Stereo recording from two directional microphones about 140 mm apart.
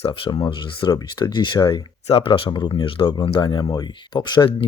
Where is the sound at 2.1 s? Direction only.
40° left (ahead or behind).